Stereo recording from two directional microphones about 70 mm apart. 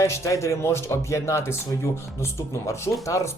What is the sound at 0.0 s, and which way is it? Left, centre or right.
Speech, left.